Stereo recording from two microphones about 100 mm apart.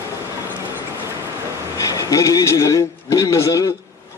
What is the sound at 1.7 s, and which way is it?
A man's voice, 35° left (ahead or behind).